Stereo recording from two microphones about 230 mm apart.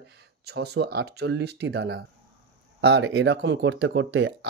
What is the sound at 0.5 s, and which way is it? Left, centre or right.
Speech, right.